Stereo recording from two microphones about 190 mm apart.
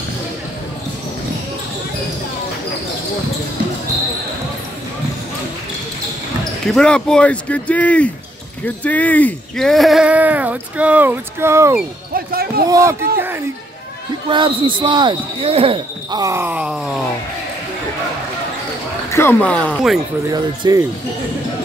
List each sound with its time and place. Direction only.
6.7 s speech: 5° left (ahead or behind); by 11.8 s 15° right (ahead or behind)
12.1 s speech: 50° right (ahead or behind)
12.6 s speech: 15° right (ahead or behind)
14.3 s speech: 25° right (ahead or behind); by 17.0 s 5° right (ahead or behind)
19.1 s speech: 10° left (ahead or behind)
20.2 s speech: 20° right (ahead or behind)